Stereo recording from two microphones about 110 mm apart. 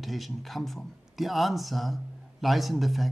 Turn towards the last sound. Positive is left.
turn(degrees=0)  # may be behind; listen again after turning